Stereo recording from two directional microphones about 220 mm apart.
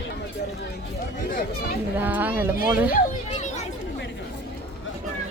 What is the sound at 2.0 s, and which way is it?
Speech, 10° right (ahead or behind).